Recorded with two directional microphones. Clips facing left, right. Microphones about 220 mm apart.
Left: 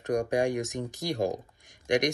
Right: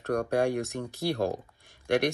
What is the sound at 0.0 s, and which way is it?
Speech, 15° left (ahead or behind).